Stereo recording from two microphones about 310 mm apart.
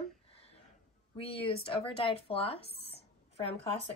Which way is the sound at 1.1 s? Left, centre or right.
Centre.